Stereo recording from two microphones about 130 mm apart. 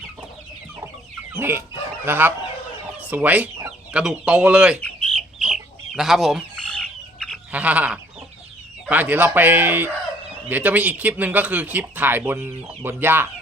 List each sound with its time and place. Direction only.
1.3 s chicken: 15° right (ahead or behind)
2.0 s speech: 15° right (ahead or behind)
5.1 s chicken: centre (ahead or behind)
7.5 s speech: 10° right (ahead or behind)